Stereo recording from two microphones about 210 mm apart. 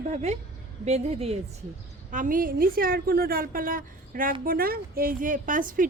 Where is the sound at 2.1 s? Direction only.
40° right (ahead or behind).